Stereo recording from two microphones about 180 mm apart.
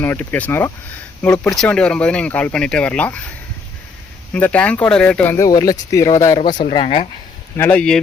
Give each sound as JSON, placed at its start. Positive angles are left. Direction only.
{"t": 0.0, "sound": "speech", "side_deg": 10}
{"t": 4.4, "sound": "speech", "side_deg": 10}
{"t": 7.5, "sound": "speech", "side_deg": 10}